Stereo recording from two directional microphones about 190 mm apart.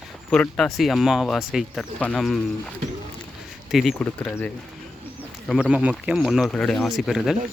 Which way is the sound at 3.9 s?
10° left (ahead or behind).